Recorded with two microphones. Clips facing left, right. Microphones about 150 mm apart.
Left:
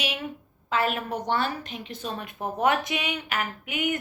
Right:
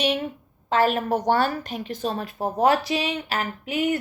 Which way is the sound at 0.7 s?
35° right (ahead or behind).